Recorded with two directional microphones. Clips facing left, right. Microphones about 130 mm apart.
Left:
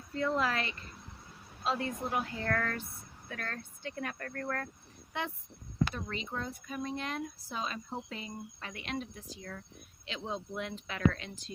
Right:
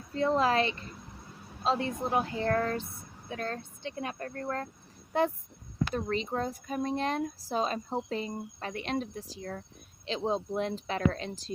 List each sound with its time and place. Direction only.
0.1 s speech: 25° right (ahead or behind)
5.1 s speech: 40° right (ahead or behind)